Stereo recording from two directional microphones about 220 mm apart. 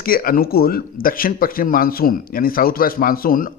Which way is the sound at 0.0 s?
40° left (ahead or behind).